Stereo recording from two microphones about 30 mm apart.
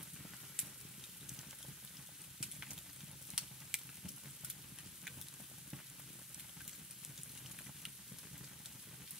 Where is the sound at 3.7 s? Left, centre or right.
Centre.